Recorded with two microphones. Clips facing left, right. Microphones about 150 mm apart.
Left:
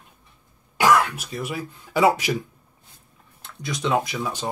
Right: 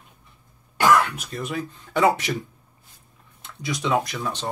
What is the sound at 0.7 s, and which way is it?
Speech, 5° left (ahead or behind).